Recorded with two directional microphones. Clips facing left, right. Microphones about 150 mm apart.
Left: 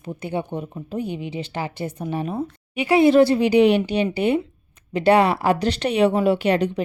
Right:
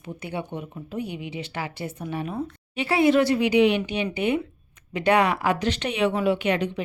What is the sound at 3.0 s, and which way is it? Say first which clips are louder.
A woman's voice: left 4 dB; 30° left (ahead or behind).